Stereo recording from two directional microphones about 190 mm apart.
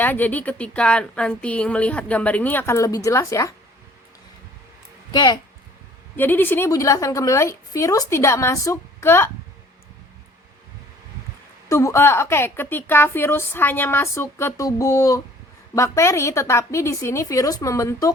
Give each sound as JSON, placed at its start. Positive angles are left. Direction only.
{"t": 0.0, "sound": "a woman's voice", "side_deg": 10}
{"t": 5.1, "sound": "speech", "side_deg": 20}
{"t": 6.1, "sound": "a woman's voice", "side_deg": 10}
{"t": 11.7, "sound": "a woman's voice", "side_deg": 15}